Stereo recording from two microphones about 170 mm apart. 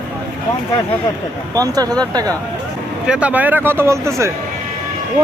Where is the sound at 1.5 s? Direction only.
20° right (ahead or behind).